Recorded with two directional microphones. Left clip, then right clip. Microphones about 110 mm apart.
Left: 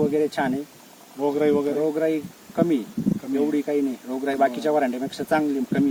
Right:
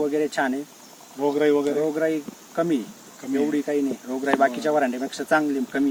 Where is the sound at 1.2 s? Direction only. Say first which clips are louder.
Right 1 dB; 25° left (ahead or behind).